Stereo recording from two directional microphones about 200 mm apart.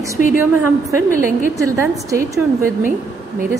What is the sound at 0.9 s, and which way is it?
A woman's voice, 15° right (ahead or behind).